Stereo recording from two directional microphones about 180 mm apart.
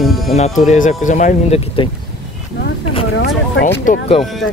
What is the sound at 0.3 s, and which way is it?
Speech, 40° left (ahead or behind).